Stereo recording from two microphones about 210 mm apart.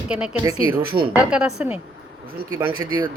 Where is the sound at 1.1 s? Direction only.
5° right (ahead or behind).